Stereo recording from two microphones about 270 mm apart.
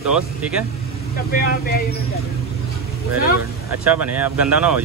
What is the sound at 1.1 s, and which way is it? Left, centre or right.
Speech, left.